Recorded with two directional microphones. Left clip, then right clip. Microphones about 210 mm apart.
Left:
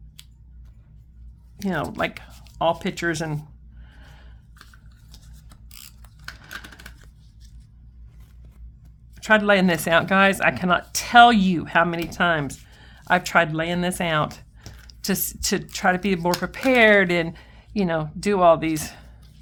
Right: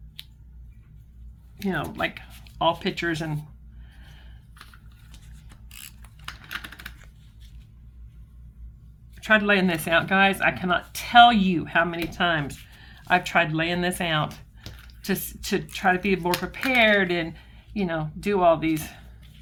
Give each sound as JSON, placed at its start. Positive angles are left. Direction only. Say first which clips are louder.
{"t": 0.2, "sound": "scissors", "louder": "right 5 dB", "side_deg": 5}
{"t": 1.6, "sound": "speech", "louder": "left 2 dB", "side_deg": 40}
{"t": 3.9, "sound": "gasp", "louder": "left 2 dB", "side_deg": 40}
{"t": 6.2, "sound": "typing", "louder": "right 2 dB", "side_deg": -5}
{"t": 9.2, "sound": "speech", "louder": "left 3 dB", "side_deg": 40}